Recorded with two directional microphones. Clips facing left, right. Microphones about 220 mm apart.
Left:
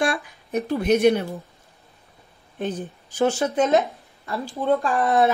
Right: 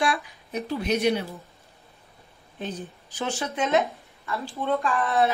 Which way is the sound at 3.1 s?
45° left (ahead or behind).